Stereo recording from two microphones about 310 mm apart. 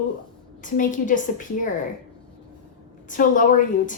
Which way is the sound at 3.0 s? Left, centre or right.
Left.